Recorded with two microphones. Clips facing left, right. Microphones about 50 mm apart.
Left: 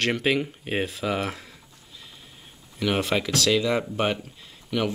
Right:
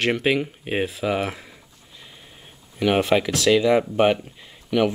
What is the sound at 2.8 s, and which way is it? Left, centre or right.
Speech, centre.